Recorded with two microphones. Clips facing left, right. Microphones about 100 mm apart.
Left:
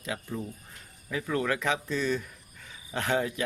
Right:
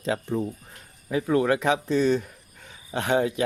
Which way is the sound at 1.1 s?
20° right (ahead or behind).